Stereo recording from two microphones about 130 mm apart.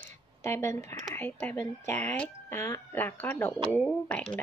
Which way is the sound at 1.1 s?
15° left (ahead or behind).